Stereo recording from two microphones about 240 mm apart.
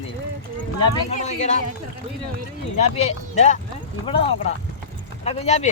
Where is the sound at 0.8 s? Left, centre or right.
Left.